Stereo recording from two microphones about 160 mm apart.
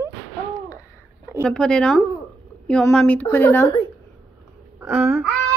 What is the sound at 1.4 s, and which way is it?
A woman's voice, 5° left (ahead or behind).